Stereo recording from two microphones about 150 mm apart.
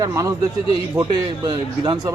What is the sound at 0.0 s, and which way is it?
Speech, 20° right (ahead or behind).